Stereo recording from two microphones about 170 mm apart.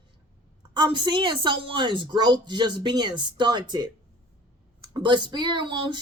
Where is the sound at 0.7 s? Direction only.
25° right (ahead or behind).